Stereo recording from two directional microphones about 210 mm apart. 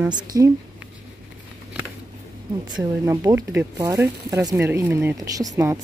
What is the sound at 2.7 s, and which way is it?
Speech, 15° right (ahead or behind).